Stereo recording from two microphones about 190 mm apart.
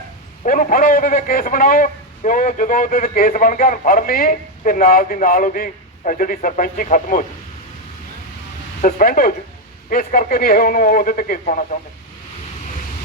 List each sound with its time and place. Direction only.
0.4 s a man's voice: 45° left (ahead or behind)
8.8 s a man's voice: 50° left (ahead or behind)